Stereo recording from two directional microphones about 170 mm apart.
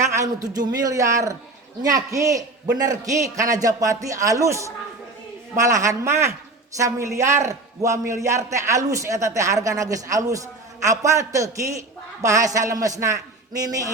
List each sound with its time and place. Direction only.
0.0 s a man's voice: 15° right (ahead or behind)